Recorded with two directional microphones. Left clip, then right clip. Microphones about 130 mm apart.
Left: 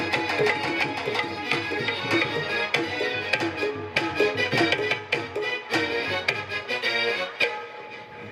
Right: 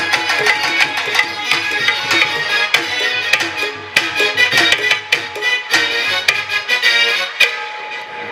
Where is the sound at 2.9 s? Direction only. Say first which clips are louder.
Right 10 dB; 15° right (ahead or behind).